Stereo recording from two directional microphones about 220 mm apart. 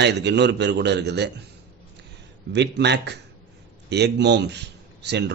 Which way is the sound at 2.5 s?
50° right (ahead or behind).